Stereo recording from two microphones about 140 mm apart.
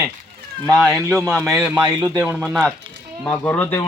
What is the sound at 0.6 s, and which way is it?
Speech, 20° right (ahead or behind).